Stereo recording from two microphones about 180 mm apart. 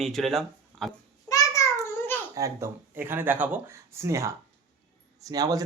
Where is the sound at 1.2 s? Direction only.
15° left (ahead or behind).